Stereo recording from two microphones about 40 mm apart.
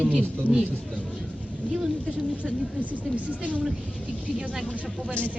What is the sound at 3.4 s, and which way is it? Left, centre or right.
Speech, right.